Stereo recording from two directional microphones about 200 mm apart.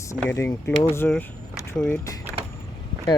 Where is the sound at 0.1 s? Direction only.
15° left (ahead or behind).